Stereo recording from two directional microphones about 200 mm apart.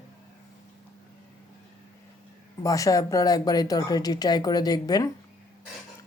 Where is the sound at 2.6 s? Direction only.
15° left (ahead or behind).